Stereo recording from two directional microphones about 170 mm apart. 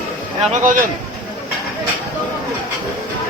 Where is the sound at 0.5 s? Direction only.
50° right (ahead or behind).